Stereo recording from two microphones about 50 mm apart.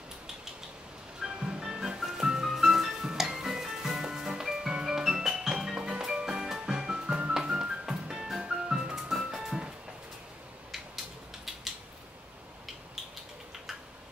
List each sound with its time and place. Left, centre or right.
1.2 s music: centre